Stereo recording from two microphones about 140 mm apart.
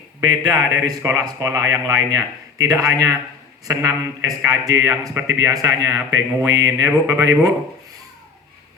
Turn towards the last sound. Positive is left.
turn(degrees=-25)  # may be behind; listen again after turning